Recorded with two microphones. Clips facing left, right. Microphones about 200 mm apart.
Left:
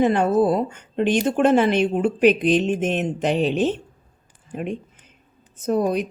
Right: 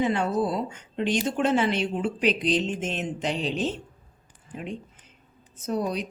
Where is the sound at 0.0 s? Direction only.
55° left (ahead or behind).